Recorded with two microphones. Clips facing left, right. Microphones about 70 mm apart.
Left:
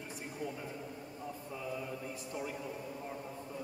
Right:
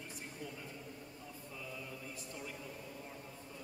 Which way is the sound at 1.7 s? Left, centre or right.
Centre.